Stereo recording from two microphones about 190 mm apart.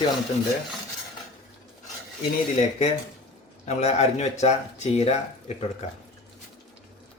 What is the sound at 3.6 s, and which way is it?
Speech, 35° left (ahead or behind).